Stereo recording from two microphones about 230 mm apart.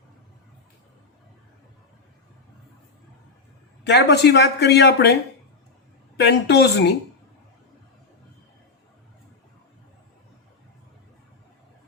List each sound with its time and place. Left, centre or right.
3.8 s speech: left
6.1 s speech: left